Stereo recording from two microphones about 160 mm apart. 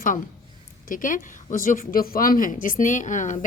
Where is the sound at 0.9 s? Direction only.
55° left (ahead or behind).